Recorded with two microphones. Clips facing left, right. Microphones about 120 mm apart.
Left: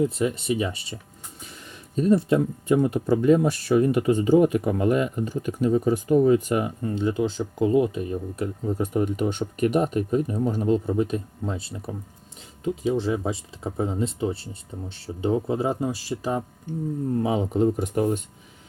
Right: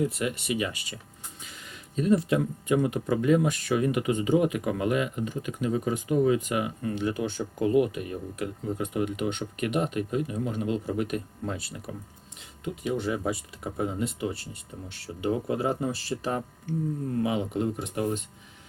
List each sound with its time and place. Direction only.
0.0 s speech: 35° left (ahead or behind)
0.9 s speech: 20° left (ahead or behind)
2.0 s speech: 35° left (ahead or behind)
7.1 s speech: 25° left (ahead or behind)
15.7 s speech: 15° left (ahead or behind)
17.2 s speech: 35° left (ahead or behind)